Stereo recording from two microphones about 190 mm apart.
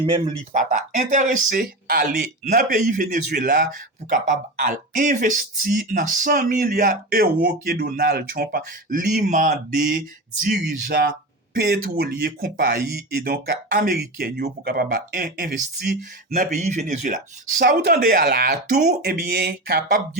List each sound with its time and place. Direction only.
0.0 s speech: 30° right (ahead or behind)
0.5 s a man's voice: 45° right (ahead or behind)
16.3 s a man's voice: 40° right (ahead or behind)